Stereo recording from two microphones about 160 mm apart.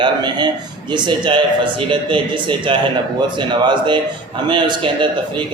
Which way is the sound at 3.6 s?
30° right (ahead or behind).